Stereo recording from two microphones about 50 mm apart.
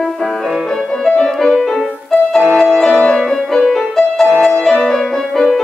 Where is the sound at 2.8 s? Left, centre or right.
Centre.